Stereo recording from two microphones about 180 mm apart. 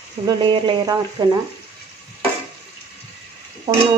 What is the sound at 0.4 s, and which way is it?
Speech, 25° right (ahead or behind).